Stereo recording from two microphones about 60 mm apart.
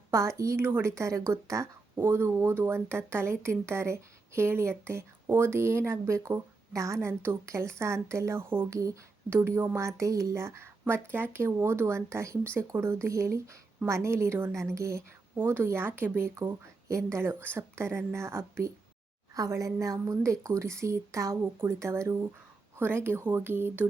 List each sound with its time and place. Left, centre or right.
0.1 s speech: right
0.6 s speech: right
0.9 s a woman's voice: right
2.0 s speech: right
6.1 s speech: right
7.1 s speech: right
7.4 s speech: right
9.7 s speech: right
15.4 s speech: right
16.9 s speech: right
19.3 s a woman's voice: right
22.8 s speech: right